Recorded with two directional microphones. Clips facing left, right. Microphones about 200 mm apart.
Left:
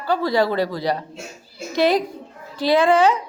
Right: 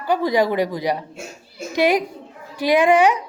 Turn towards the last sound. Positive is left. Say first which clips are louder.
# right 1 dB
turn(degrees=-15)  # may be behind; listen again after turning